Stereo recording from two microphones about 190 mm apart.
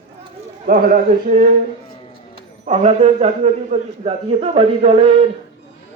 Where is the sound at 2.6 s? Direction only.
35° right (ahead or behind).